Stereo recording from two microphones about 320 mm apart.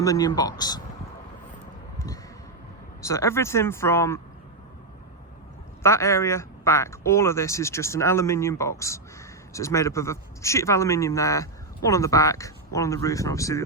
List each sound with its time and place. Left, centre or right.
0.0 s speech: centre
3.1 s speech: centre
5.8 s speech: centre